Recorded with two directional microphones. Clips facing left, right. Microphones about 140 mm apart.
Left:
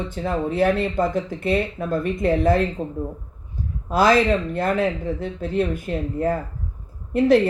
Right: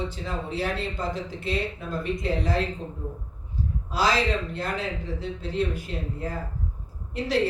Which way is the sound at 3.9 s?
50° left (ahead or behind).